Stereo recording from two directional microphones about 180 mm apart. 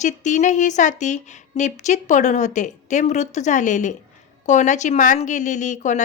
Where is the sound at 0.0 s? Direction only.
40° left (ahead or behind).